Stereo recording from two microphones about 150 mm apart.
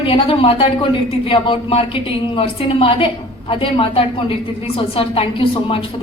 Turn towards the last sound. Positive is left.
turn(degrees=35)  # may be behind; listen again after turning